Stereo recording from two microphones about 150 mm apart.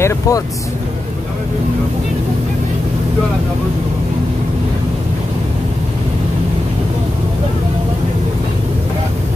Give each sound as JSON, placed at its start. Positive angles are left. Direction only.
{"t": 0.0, "sound": "speech", "side_deg": 20}